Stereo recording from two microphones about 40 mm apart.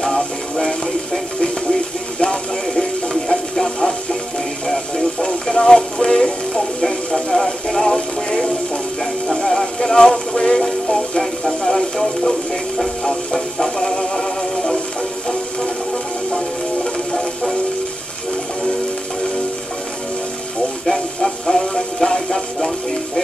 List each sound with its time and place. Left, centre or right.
0.1 s music: centre
2.7 s music: centre
13.7 s synthetic singing: centre
20.8 s music: centre